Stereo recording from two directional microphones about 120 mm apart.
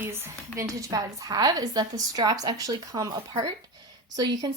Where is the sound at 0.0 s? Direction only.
20° right (ahead or behind).